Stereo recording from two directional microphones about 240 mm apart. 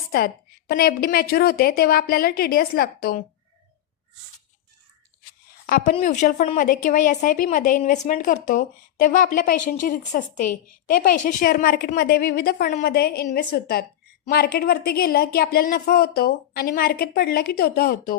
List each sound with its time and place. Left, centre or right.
0.7 s a woman's voice: left
5.6 s a woman's voice: left